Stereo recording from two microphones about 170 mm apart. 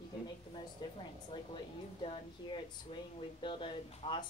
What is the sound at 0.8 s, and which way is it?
A woman's voice, 25° left (ahead or behind).